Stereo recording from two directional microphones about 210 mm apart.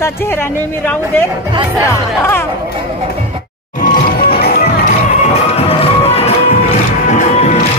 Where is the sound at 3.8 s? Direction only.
45° left (ahead or behind).